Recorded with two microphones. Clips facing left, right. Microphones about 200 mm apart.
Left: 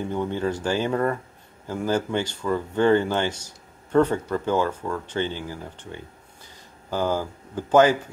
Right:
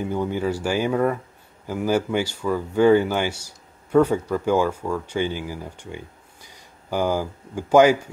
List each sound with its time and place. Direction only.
0.0 s speech: 10° right (ahead or behind)